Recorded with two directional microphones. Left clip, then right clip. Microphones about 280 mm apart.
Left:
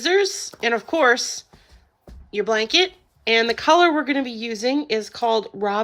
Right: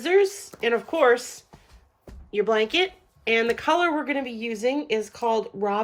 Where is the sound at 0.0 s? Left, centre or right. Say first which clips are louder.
Left 1 dB; centre.